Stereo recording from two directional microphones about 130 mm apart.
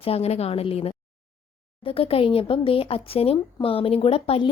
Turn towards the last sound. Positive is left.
turn(degrees=45)  # may be behind; listen again after turning